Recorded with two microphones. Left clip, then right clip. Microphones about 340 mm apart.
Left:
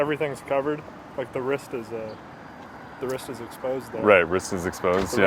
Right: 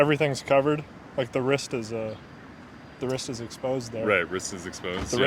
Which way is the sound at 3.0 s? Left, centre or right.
Right.